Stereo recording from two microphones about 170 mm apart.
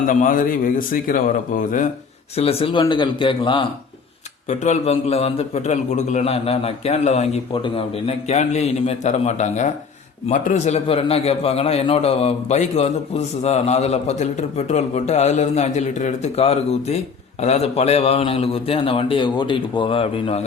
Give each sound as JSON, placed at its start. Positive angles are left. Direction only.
{"t": 0.1, "sound": "a man's voice", "side_deg": 55}
{"t": 2.3, "sound": "a man's voice", "side_deg": 35}
{"t": 4.4, "sound": "a man's voice", "side_deg": 40}